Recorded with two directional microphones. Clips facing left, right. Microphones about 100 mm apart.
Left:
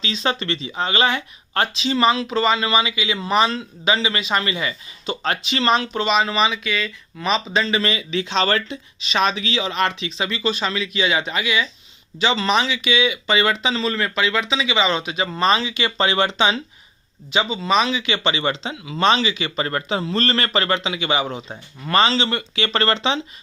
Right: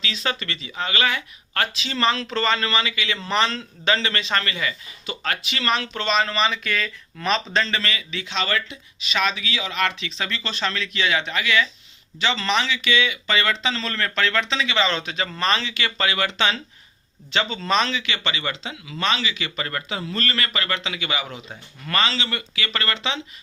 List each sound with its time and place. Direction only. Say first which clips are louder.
0.0 s speech: left 4 dB; 25° left (ahead or behind)
6.1 s speech: left 2 dB; 10° left (ahead or behind)
17.9 s speech: left 5 dB; 20° left (ahead or behind)